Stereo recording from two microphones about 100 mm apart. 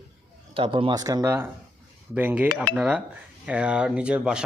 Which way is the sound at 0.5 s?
65° right (ahead or behind).